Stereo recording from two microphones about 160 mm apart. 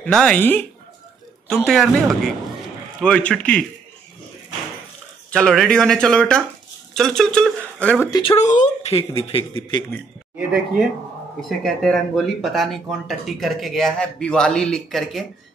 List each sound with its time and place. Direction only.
0.0 s speech: 5° left (ahead or behind)
5.3 s speech: 5° left (ahead or behind)
8.1 s speech: 35° left (ahead or behind)
8.5 s speech: 50° left (ahead or behind)
9.3 s a man's voice: 30° left (ahead or behind)
11.4 s speech: centre (ahead or behind)